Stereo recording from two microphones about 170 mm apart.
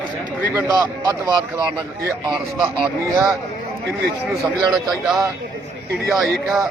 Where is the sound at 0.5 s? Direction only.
20° right (ahead or behind).